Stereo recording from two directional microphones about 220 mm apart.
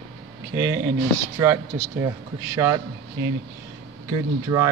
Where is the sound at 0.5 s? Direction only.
15° right (ahead or behind).